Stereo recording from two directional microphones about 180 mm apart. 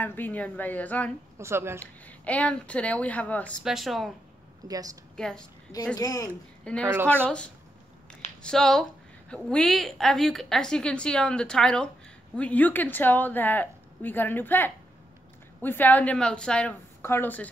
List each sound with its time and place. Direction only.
0.0 s speech: 10° left (ahead or behind)
1.4 s speech: 15° right (ahead or behind)
1.8 s a woman's voice: 10° left (ahead or behind)
4.6 s speech: 20° right (ahead or behind)
5.1 s a woman's voice: 5° left (ahead or behind)
5.9 s a woman's voice: 20° left (ahead or behind)
6.6 s a woman's voice: 5° left (ahead or behind)